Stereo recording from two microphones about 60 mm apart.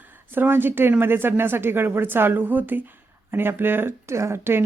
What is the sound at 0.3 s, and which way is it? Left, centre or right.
Speech, right.